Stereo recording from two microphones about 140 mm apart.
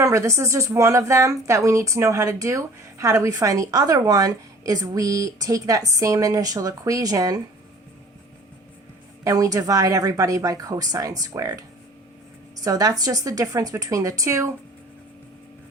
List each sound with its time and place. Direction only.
0.0 s a woman's voice: 20° right (ahead or behind)
9.2 s a woman's voice: 25° right (ahead or behind)
12.6 s a woman's voice: 25° right (ahead or behind)